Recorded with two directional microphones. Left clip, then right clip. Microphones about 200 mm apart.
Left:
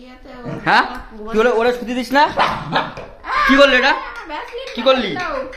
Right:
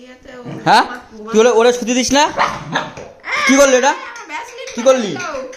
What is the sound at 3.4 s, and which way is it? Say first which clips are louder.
Chuckle: right 1 dB; 55° right (ahead or behind).